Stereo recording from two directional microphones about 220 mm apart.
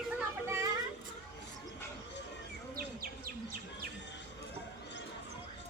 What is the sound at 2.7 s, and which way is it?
Bird, 40° right (ahead or behind).